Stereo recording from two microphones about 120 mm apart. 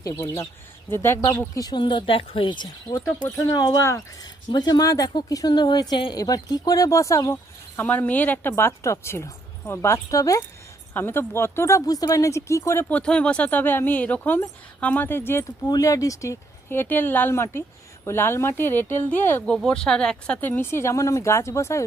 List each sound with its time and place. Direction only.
0.0 s a woman's voice: 30° left (ahead or behind)
1.5 s speech: 35° left (ahead or behind)
3.8 s a woman's voice: 25° left (ahead or behind)
4.5 s speech: 35° left (ahead or behind)
7.8 s a woman's voice: 15° left (ahead or behind)
10.9 s a woman's voice: 20° left (ahead or behind)
12.9 s a woman's voice: 10° left (ahead or behind)
19.6 s a woman's voice: 5° left (ahead or behind); by 21.8 s 25° left (ahead or behind)